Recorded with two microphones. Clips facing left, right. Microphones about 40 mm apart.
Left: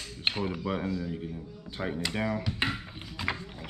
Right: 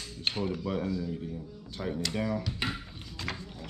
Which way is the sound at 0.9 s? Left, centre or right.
Left.